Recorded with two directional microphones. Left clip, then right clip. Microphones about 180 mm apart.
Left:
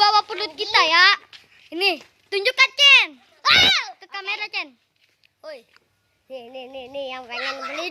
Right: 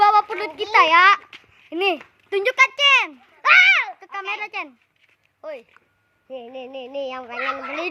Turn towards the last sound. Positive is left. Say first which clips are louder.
# right 2 dB
turn(degrees=-5)  # may be behind; listen again after turning